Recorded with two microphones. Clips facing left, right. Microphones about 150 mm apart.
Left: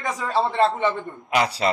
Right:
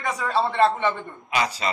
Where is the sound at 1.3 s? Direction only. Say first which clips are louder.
Left 4 dB; 65° left (ahead or behind).